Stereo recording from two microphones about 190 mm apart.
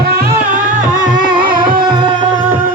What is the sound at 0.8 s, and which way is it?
Music, 45° right (ahead or behind).